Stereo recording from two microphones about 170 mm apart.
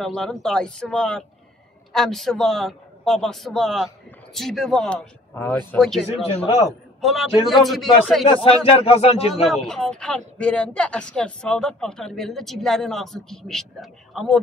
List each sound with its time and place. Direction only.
0.0 s a woman's voice: 5° left (ahead or behind)
6.0 s speech: 35° left (ahead or behind)
7.0 s a woman's voice: centre (ahead or behind)
8.3 s speech: 35° left (ahead or behind)
9.7 s a woman's voice: 5° left (ahead or behind)